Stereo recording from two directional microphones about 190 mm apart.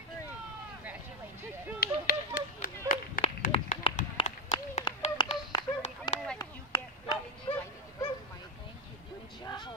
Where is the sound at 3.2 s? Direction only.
35° left (ahead or behind).